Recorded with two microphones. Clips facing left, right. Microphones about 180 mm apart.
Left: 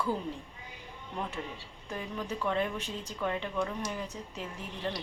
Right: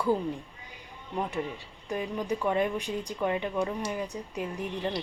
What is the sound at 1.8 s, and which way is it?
A woman's voice, 15° right (ahead or behind).